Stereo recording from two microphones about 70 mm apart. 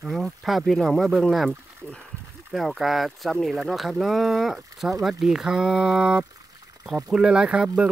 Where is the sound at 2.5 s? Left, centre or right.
Centre.